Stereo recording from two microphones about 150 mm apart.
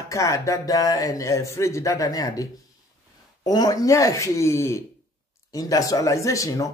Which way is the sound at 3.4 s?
25° left (ahead or behind).